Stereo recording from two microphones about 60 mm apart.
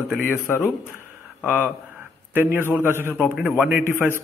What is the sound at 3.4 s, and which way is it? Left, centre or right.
Speech, centre.